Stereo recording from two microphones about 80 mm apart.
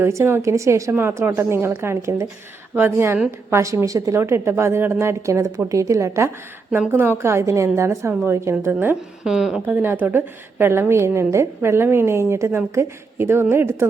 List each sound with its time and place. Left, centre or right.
0.0 s a woman's voice: right
3.5 s a woman's voice: right
4.2 s a woman's voice: right
6.7 s a woman's voice: right
9.2 s speech: centre
9.6 s a woman's voice: right